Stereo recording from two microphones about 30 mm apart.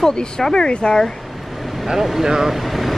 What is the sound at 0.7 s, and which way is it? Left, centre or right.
Speech, left.